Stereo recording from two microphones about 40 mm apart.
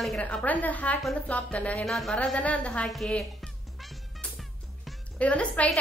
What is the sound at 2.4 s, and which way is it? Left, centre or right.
Speech, left.